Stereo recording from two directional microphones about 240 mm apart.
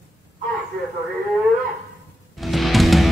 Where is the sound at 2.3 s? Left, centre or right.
Centre.